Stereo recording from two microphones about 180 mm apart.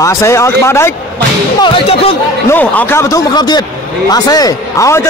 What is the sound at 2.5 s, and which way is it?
Speech, 10° left (ahead or behind).